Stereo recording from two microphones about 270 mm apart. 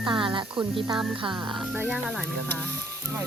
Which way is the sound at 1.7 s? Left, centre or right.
Centre.